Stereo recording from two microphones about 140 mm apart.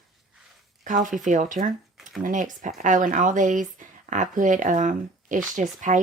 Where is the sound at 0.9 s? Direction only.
65° right (ahead or behind).